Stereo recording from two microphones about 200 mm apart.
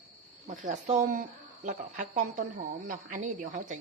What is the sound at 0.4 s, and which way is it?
Speech, 35° right (ahead or behind).